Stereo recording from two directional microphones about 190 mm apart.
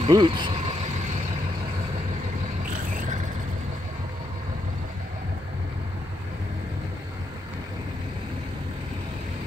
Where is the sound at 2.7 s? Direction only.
45° right (ahead or behind).